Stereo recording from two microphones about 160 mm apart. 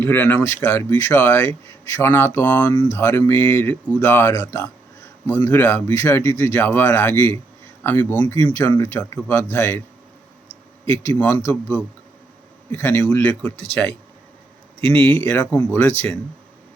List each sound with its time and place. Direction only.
0.0 s speech: 15° left (ahead or behind)
8.2 s speech: 25° left (ahead or behind)
10.8 s speech: 15° left (ahead or behind)
12.7 s speech: 15° left (ahead or behind)
15.0 s speech: 15° left (ahead or behind)